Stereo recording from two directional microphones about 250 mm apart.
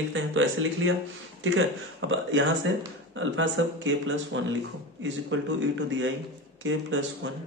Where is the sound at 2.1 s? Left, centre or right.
Right.